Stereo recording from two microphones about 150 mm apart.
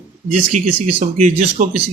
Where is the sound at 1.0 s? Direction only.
55° right (ahead or behind).